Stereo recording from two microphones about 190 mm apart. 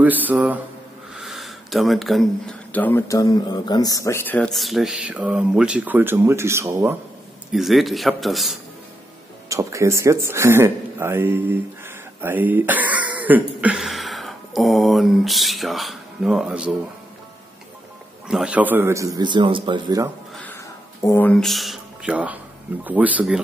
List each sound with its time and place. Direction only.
0.0 s a man's voice: 10° right (ahead or behind)
7.5 s speech: centre (ahead or behind)
9.5 s speech: 15° right (ahead or behind)
18.3 s a man's voice: 5° right (ahead or behind); by 20.1 s 20° right (ahead or behind)
20.4 s a sound: 15° left (ahead or behind); by 22.4 s 5° right (ahead or behind)
22.8 s a man's voice: 10° right (ahead or behind)